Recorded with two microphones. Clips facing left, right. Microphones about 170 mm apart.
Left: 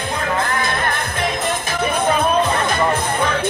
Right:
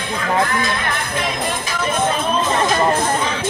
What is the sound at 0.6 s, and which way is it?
Music, 55° left (ahead or behind).